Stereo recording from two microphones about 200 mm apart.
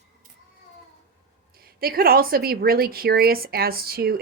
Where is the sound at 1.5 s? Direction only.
50° right (ahead or behind).